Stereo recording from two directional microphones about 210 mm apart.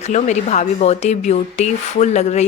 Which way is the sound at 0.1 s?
35° left (ahead or behind).